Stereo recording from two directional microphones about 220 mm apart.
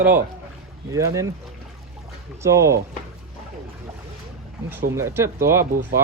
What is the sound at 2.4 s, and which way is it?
Speech, 15° right (ahead or behind).